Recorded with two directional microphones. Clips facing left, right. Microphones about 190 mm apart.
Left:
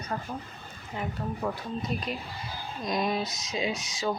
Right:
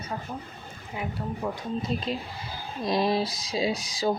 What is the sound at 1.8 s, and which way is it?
Speech, 25° right (ahead or behind).